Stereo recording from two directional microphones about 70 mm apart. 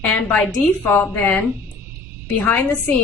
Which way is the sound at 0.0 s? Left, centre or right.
Left.